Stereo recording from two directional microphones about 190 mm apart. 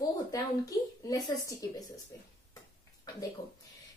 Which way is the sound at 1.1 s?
15° left (ahead or behind).